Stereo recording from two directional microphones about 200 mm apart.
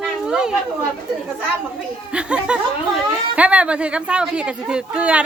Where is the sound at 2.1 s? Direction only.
5° right (ahead or behind).